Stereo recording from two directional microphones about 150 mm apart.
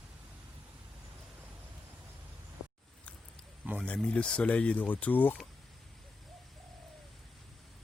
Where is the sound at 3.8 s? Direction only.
10° left (ahead or behind).